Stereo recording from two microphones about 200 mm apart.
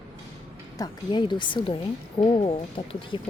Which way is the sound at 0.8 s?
25° left (ahead or behind).